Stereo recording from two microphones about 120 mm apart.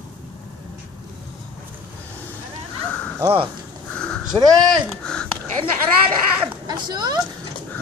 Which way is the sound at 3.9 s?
10° left (ahead or behind).